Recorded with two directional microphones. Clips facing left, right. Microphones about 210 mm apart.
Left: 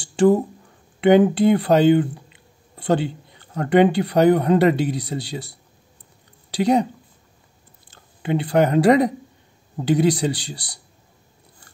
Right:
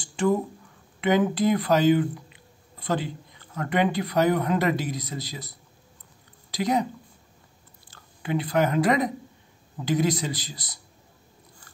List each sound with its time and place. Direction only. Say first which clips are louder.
0.1 s a sound: left 8 dB; 30° left (ahead or behind)
1.0 s a man's voice: left 7 dB; 30° left (ahead or behind)
6.5 s a man's voice: left 6 dB; 30° left (ahead or behind)
8.2 s a man's voice: left 5 dB; 25° left (ahead or behind)